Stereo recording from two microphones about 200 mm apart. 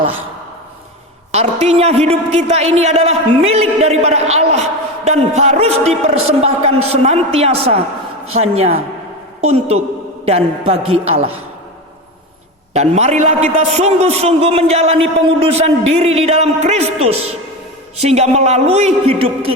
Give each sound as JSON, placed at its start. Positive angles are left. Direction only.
{"t": 1.3, "sound": "a man's voice", "side_deg": -30}
{"t": 12.7, "sound": "a man's voice", "side_deg": -35}